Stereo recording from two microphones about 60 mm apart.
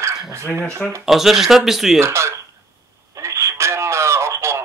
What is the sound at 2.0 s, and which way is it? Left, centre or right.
Speech, right.